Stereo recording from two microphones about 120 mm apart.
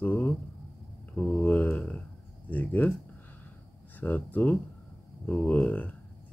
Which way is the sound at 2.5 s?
15° left (ahead or behind).